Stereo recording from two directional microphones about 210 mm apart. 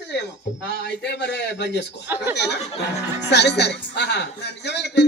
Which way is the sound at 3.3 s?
55° left (ahead or behind).